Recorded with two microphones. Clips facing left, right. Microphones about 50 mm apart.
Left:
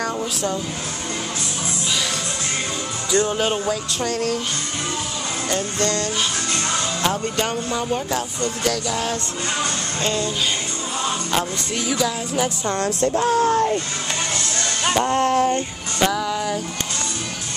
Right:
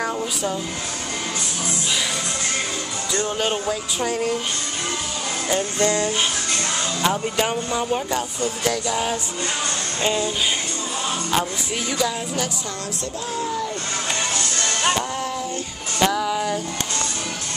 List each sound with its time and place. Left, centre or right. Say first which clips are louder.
0.0 s speech: left 1 dB; centre
3.1 s music: left 4 dB; centre
5.5 s music: right 2 dB; centre
7.3 s music: right 1 dB; centre
12.6 s speech: left 9 dB; left
15.0 s speech: left 8 dB; left
16.1 s music: even; centre